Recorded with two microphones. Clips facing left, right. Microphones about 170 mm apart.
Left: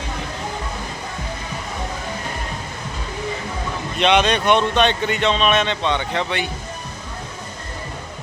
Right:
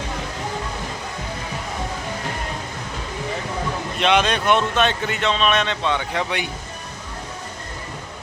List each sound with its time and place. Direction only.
4.0 s speech: 5° right (ahead or behind)